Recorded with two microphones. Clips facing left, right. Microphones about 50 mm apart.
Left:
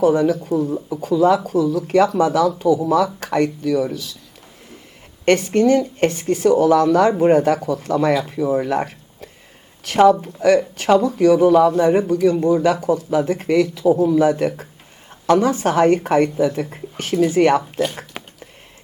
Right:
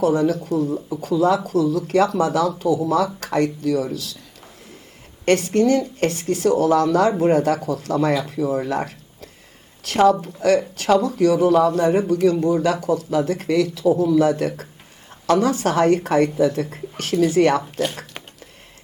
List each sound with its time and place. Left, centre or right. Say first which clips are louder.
0.0 s speech: left 3 dB; left
1.6 s speech: left 2 dB; left
5.2 s speech: left 2 dB; left
8.2 s speech: left 3 dB; left
18.2 s a sound: left 3 dB; centre